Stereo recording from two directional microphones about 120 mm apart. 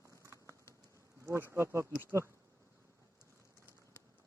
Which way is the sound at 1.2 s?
20° right (ahead or behind).